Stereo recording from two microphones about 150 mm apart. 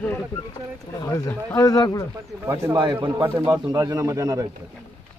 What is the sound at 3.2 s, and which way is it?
Speech, 15° right (ahead or behind).